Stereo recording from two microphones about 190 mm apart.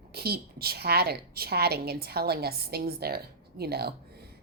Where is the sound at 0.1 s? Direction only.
55° right (ahead or behind).